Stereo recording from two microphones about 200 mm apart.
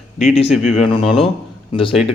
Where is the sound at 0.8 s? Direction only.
30° left (ahead or behind).